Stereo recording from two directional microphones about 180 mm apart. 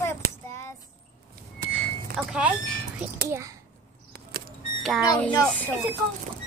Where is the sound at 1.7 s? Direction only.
5° left (ahead or behind).